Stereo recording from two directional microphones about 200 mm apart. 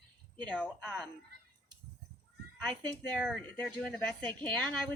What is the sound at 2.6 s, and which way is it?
A woman's voice, 5° left (ahead or behind).